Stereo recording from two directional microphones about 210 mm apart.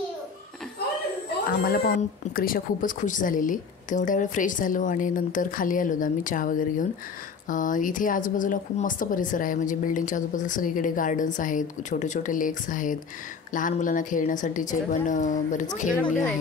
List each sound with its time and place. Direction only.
1.6 s speech: 45° left (ahead or behind)